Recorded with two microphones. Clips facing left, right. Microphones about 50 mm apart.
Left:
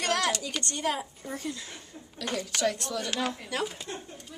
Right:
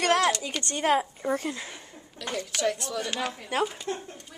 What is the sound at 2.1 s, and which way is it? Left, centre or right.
A woman's voice, centre.